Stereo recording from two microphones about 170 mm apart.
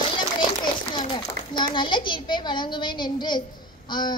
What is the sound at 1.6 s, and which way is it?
A woman's voice, 30° left (ahead or behind).